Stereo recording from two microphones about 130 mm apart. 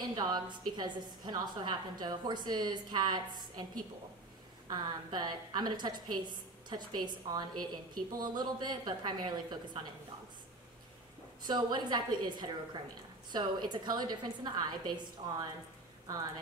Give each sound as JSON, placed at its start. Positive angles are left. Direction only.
{"t": 0.0, "sound": "a woman's voice", "side_deg": -30}
{"t": 4.6, "sound": "a woman's voice", "side_deg": -30}
{"t": 11.4, "sound": "a woman's voice", "side_deg": -35}